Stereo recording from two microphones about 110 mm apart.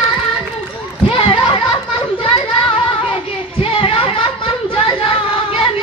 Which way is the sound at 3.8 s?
55° left (ahead or behind).